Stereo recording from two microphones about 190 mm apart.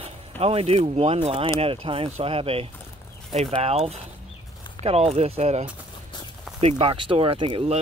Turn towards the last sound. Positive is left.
turn(degrees=-25)  # may be behind; listen again after turning